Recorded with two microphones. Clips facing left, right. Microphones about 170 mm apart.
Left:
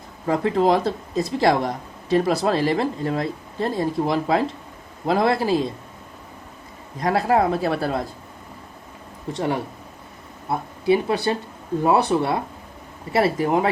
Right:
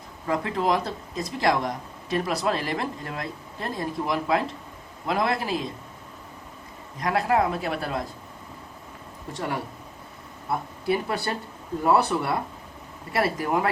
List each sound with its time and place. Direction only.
0.3 s speech: 30° left (ahead or behind)
7.0 s speech: 30° left (ahead or behind)
9.3 s speech: 25° left (ahead or behind)